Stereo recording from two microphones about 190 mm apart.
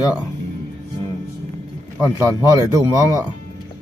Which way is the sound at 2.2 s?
15° right (ahead or behind).